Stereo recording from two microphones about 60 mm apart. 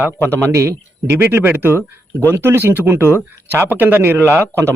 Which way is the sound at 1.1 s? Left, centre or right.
Right.